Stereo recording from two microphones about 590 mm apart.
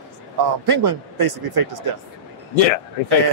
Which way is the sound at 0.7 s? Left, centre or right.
Right.